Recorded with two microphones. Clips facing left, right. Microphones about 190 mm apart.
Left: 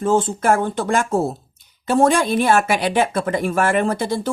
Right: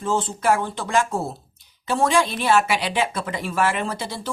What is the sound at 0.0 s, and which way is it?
Speech, 50° left (ahead or behind).